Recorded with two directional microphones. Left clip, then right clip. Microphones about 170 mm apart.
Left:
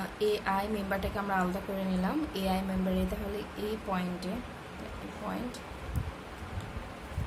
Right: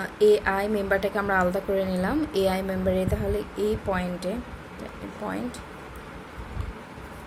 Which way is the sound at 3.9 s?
25° right (ahead or behind).